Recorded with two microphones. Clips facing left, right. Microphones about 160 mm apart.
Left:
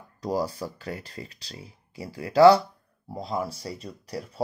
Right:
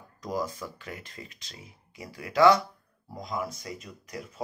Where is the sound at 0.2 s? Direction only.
35° left (ahead or behind).